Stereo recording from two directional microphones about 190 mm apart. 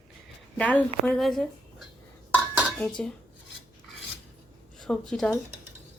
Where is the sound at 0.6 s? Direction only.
10° left (ahead or behind).